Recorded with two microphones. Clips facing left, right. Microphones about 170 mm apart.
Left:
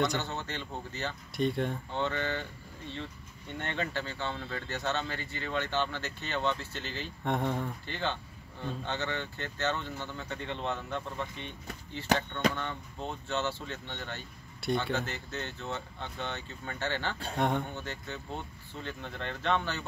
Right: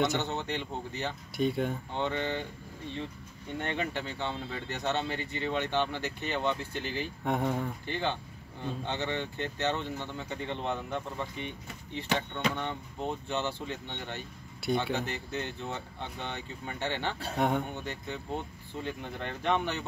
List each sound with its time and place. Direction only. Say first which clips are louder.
0.2 s speech: right 4 dB; 15° right (ahead or behind)
1.3 s speech: right 1 dB; centre (ahead or behind)
1.9 s speech: right 1 dB; 15° right (ahead or behind)
3.5 s speech: right 1 dB; 15° right (ahead or behind)
7.2 s speech: right 1 dB; 5° right (ahead or behind)
7.8 s speech: right 2 dB; 15° right (ahead or behind)
12.5 s speech: right 2 dB; 15° right (ahead or behind)
17.2 s speech: right 1 dB; 5° right (ahead or behind)
17.7 s speech: right 2 dB; 15° right (ahead or behind)